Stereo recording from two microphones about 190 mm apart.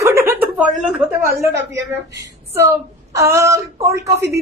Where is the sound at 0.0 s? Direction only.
15° right (ahead or behind).